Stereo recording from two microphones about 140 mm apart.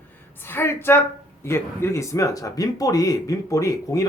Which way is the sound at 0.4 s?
15° left (ahead or behind).